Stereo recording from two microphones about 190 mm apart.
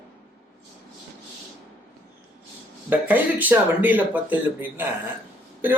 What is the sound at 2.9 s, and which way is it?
Speech, 10° right (ahead or behind).